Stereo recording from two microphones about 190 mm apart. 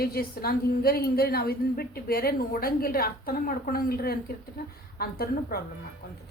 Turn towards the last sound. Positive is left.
turn(degrees=55)  # may be behind; listen again after turning